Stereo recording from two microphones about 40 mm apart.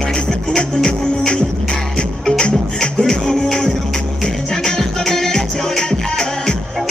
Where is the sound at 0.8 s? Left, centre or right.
Left.